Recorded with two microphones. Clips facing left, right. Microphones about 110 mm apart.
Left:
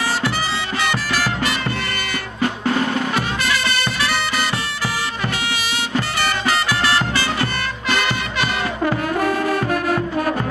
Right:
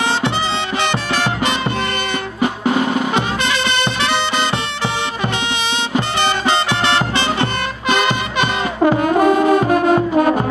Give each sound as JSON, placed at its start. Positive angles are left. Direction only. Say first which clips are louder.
{"t": 0.8, "sound": "music", "louder": "right 1 dB", "side_deg": -25}
{"t": 2.4, "sound": "music", "louder": "right 3 dB", "side_deg": -15}
{"t": 5.9, "sound": "music", "louder": "right 4 dB", "side_deg": -25}